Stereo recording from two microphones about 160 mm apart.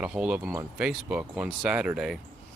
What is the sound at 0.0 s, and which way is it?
Speech, 5° right (ahead or behind).